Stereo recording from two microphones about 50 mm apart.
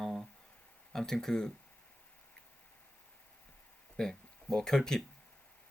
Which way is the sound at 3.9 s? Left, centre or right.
Centre.